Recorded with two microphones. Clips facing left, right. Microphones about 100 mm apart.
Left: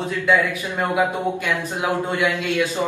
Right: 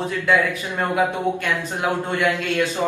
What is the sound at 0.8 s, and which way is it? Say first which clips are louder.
Speech: even; 15° left (ahead or behind).